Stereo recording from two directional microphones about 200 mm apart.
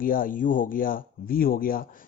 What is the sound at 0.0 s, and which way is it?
Speech, 45° left (ahead or behind).